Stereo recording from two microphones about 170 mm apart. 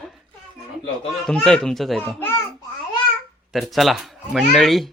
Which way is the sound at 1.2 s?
5° left (ahead or behind).